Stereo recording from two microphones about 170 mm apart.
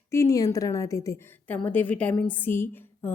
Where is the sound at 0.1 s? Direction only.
20° left (ahead or behind).